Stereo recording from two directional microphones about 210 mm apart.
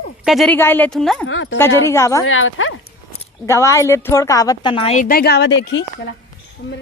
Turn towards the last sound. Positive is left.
turn(degrees=50)  # may be behind; listen again after turning